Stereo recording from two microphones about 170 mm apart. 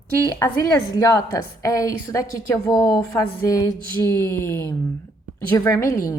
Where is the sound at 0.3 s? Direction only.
15° left (ahead or behind).